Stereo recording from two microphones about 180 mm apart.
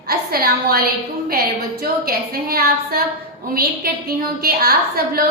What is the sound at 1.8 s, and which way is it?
A woman's voice, 55° right (ahead or behind).